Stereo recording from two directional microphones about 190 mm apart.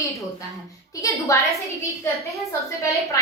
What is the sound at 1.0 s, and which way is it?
Speech, 15° left (ahead or behind).